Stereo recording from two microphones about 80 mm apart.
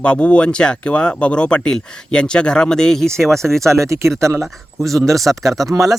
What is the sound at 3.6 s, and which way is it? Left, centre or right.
Speech, right.